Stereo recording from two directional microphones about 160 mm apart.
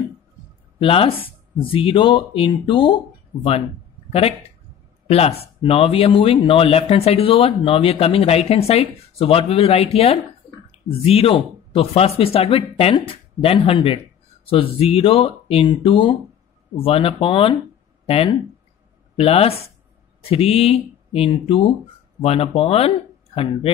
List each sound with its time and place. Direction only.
0.7 s speech: 35° left (ahead or behind)
5.0 s speech: 40° left (ahead or behind)